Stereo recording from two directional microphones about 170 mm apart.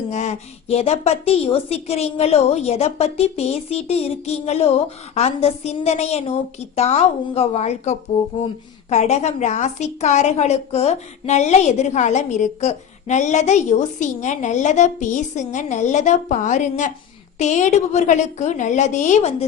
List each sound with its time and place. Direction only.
0.1 s a woman's voice: 40° left (ahead or behind)